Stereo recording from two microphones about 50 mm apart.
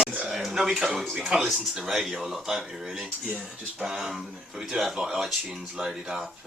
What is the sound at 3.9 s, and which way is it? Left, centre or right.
Speech, centre.